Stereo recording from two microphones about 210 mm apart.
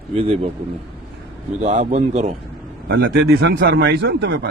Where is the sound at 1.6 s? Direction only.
30° right (ahead or behind).